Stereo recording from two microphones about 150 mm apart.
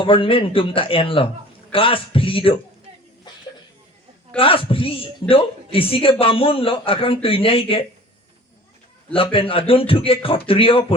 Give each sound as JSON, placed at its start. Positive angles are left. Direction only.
{"t": 0.0, "sound": "a man's voice", "side_deg": 35}
{"t": 4.4, "sound": "a man's voice", "side_deg": 35}
{"t": 9.1, "sound": "a man's voice", "side_deg": 35}